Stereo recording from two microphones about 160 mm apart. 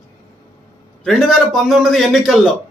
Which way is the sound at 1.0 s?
Centre (ahead or behind).